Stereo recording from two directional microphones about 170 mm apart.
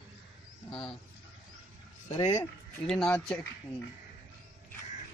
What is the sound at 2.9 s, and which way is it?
Speech, 5° left (ahead or behind).